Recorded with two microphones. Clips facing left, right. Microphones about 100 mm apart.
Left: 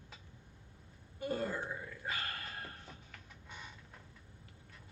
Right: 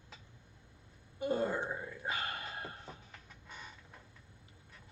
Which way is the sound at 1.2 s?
20° right (ahead or behind).